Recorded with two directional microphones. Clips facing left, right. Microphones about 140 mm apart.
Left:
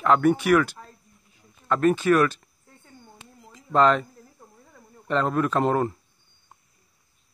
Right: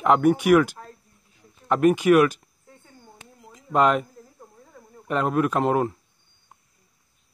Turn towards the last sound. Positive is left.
turn(degrees=0)  # may be behind; listen again after turning